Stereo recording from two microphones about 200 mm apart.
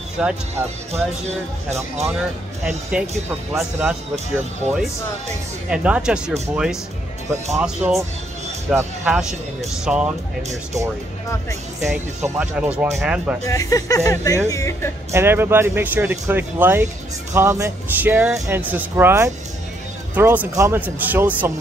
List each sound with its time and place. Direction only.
0.2 s speech: 10° right (ahead or behind)
2.6 s speech: 5° right (ahead or behind)
5.7 s speech: 5° right (ahead or behind)
11.9 s speech: 5° right (ahead or behind)
13.5 s speech: 15° left (ahead or behind)
15.0 s speech: 10° right (ahead or behind)